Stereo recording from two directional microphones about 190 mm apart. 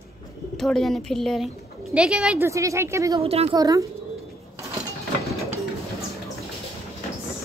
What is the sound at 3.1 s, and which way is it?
Speech, 30° right (ahead or behind).